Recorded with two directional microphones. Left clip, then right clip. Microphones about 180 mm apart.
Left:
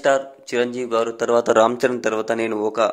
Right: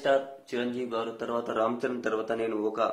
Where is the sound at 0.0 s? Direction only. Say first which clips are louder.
Left 7 dB; 55° left (ahead or behind).